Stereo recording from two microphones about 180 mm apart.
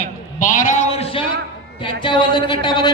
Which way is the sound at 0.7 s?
35° left (ahead or behind).